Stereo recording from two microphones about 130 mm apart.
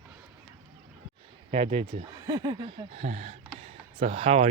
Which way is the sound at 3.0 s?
60° right (ahead or behind).